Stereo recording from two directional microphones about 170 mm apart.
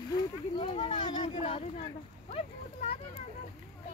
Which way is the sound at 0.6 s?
30° left (ahead or behind).